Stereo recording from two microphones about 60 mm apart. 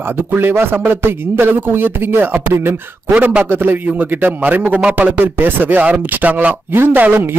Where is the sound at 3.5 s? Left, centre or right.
Right.